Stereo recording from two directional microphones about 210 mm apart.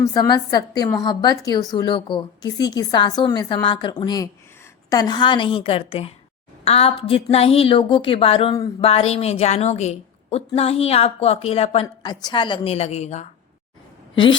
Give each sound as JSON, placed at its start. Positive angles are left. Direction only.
{"t": 0.0, "sound": "a woman's voice", "side_deg": 20}